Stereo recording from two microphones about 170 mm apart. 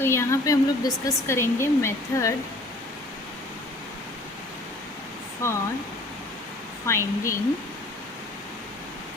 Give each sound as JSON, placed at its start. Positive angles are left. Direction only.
{"t": 0.0, "sound": "speech", "side_deg": 15}
{"t": 5.4, "sound": "speech", "side_deg": 15}
{"t": 6.8, "sound": "speech", "side_deg": 15}